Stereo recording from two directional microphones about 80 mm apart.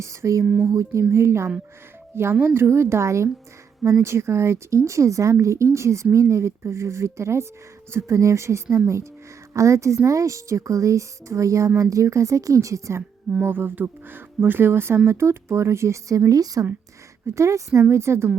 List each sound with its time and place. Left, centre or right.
0.0 s speech: right
0.4 s speech: right
0.7 s speech: right
1.1 s a woman's voice: right
13.4 s a woman's voice: right